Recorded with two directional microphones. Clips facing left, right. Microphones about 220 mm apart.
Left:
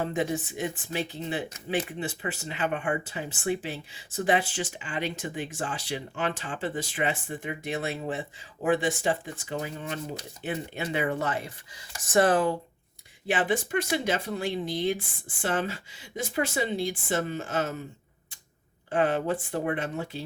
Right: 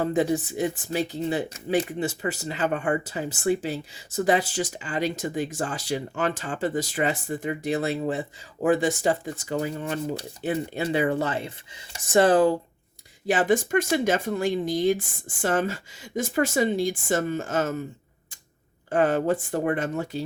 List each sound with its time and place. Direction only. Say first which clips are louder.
0.0 s speech: right 5 dB; 35° right (ahead or behind)
13.2 s speech: right 5 dB; 45° right (ahead or behind)
18.9 s speech: right 4 dB; 45° right (ahead or behind)